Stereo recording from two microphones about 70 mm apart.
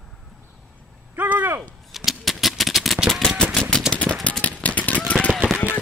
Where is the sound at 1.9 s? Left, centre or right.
Centre.